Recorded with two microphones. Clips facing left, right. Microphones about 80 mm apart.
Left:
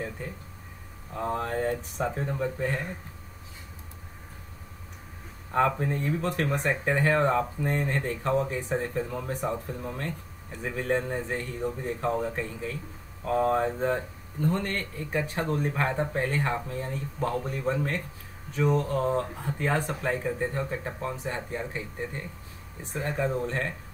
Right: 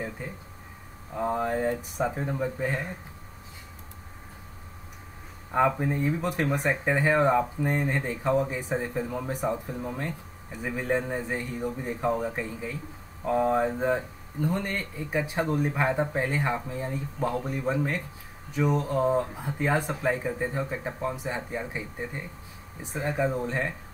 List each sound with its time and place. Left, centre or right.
1.1 s speech: centre
5.8 s speech: centre